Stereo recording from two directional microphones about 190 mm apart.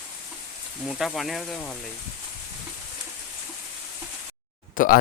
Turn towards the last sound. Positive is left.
turn(degrees=45)  # may be behind; listen again after turning